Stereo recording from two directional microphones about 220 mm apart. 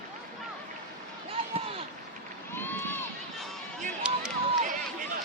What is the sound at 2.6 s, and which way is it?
Run, 10° left (ahead or behind).